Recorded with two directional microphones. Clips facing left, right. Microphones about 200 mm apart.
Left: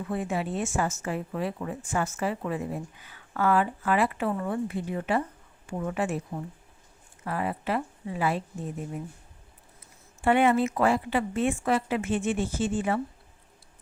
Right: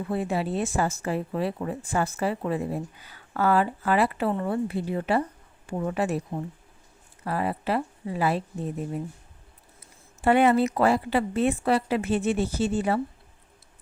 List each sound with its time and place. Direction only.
0.0 s speech: 35° right (ahead or behind)
10.2 s speech: 40° right (ahead or behind)